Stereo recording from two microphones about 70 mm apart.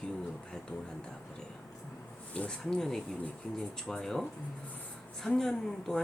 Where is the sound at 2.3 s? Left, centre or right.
Centre.